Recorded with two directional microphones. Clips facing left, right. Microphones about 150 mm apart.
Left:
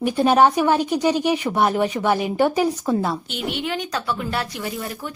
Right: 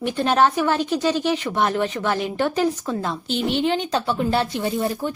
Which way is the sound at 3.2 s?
30° right (ahead or behind).